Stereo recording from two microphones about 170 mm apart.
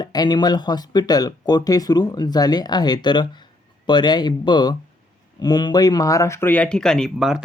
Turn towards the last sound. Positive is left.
turn(degrees=-5)  # may be behind; listen again after turning